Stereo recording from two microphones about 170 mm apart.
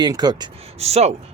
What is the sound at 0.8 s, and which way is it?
Speech, 40° right (ahead or behind).